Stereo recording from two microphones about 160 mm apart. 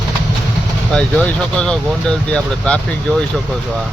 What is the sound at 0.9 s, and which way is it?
Speech, 5° left (ahead or behind).